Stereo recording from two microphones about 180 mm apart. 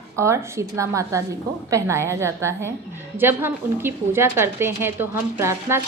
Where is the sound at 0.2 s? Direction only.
15° right (ahead or behind).